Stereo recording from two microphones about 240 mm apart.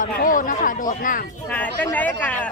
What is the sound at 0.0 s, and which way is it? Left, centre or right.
Speech, left.